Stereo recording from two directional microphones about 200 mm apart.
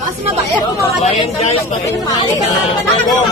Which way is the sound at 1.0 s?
30° left (ahead or behind).